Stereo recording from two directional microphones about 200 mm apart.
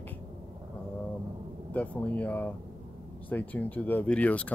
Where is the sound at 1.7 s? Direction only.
5° left (ahead or behind).